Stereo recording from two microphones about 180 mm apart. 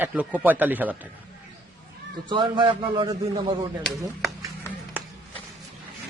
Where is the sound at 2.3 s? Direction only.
25° right (ahead or behind).